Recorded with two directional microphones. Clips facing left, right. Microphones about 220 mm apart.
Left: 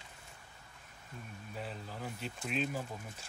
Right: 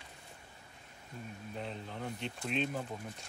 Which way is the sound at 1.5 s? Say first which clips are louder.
Right 1 dB; 5° left (ahead or behind).